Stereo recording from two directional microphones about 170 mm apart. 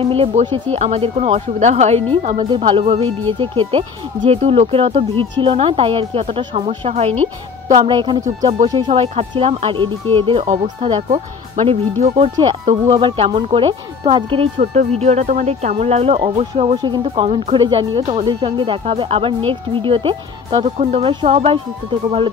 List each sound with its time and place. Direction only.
0.0 s speech: 35° right (ahead or behind)
2.3 s speech: 30° right (ahead or behind)
14.6 s speech: 45° right (ahead or behind)